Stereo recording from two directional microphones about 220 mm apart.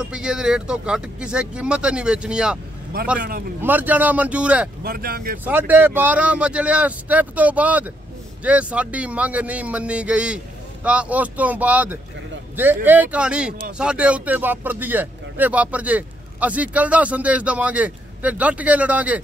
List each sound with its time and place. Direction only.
0.0 s a man's voice: 5° right (ahead or behind)
3.2 s a man's voice: 40° right (ahead or behind)
3.6 s speech: 10° right (ahead or behind)
4.8 s speech: 40° right (ahead or behind)
5.4 s a man's voice: 10° right (ahead or behind)